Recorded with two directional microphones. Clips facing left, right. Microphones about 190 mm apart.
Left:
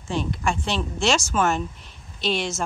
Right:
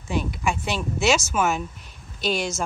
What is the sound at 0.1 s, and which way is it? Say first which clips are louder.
Speech: even; 5° right (ahead or behind).